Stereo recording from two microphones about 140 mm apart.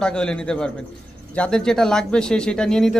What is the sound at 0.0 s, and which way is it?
Speech, 5° left (ahead or behind).